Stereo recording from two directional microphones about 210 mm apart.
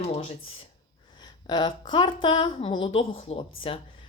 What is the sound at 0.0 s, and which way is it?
Speech, 30° left (ahead or behind).